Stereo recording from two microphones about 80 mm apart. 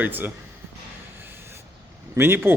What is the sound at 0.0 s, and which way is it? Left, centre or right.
Speech, right.